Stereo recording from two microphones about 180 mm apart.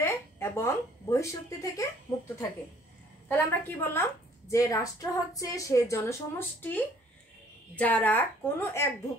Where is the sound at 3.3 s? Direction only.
10° left (ahead or behind).